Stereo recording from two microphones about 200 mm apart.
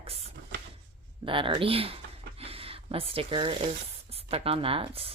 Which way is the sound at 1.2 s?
25° right (ahead or behind).